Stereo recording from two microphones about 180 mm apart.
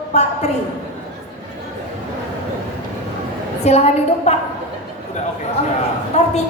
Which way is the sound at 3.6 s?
35° left (ahead or behind).